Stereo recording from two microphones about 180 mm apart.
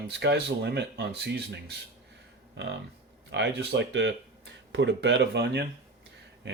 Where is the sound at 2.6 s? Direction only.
75° right (ahead or behind).